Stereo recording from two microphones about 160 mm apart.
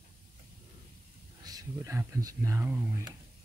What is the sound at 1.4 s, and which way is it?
Speech, 25° right (ahead or behind).